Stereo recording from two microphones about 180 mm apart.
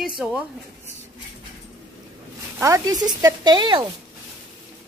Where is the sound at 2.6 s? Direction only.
15° right (ahead or behind).